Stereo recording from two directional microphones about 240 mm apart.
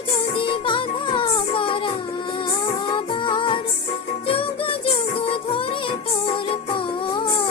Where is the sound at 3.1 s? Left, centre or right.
Centre.